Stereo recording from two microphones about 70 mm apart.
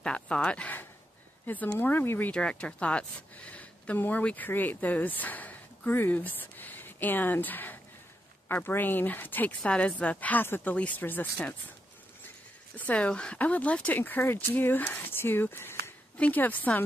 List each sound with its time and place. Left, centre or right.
0.0 s speech: centre
2.3 s speech: centre
9.6 s speech: centre
12.7 s speech: left
16.2 s speech: left